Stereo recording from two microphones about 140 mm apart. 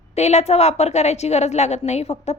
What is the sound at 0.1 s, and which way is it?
A woman's voice, 50° left (ahead or behind).